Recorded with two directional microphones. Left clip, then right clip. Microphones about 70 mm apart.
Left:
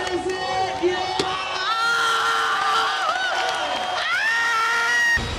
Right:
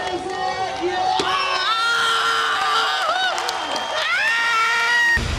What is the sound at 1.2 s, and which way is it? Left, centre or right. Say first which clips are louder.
Crowd: right 5 dB; right.